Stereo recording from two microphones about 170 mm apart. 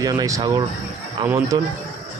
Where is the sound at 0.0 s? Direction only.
20° right (ahead or behind).